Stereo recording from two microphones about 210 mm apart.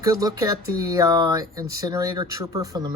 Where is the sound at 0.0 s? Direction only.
15° right (ahead or behind).